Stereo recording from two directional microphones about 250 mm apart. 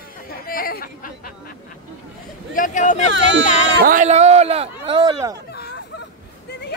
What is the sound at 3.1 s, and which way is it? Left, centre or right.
Speech, right.